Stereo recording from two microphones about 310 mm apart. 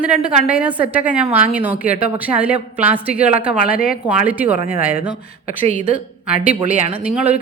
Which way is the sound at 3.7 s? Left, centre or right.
Left.